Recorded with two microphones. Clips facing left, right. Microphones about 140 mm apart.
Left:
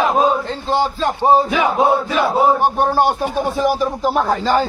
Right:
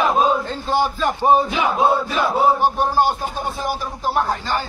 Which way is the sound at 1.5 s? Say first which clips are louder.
Left 3 dB; 60° left (ahead or behind).